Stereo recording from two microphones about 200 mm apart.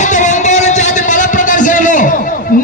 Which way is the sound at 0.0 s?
35° left (ahead or behind).